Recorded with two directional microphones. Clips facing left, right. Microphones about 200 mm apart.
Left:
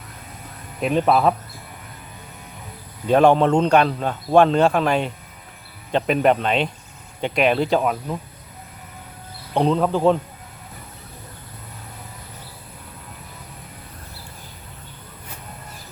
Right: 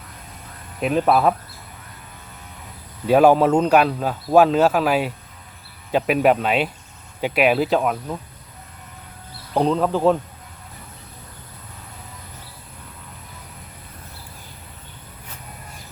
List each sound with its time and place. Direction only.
0.8 s speech: centre (ahead or behind)
3.1 s speech: 5° right (ahead or behind)
9.6 s speech: centre (ahead or behind)